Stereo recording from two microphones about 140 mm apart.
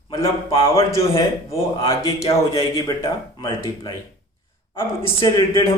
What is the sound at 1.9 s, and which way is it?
Speech, 25° left (ahead or behind).